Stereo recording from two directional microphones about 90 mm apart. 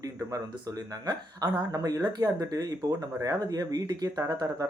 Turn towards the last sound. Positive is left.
turn(degrees=-45)  # may be behind; listen again after turning